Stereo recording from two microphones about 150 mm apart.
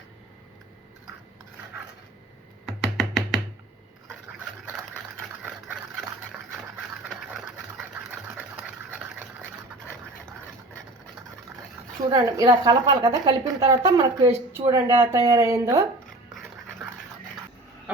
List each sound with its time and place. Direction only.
2.6 s music: centre (ahead or behind)
5.5 s a sound: 5° right (ahead or behind)
7.0 s engine: 5° right (ahead or behind)
12.1 s a woman's voice: 20° right (ahead or behind)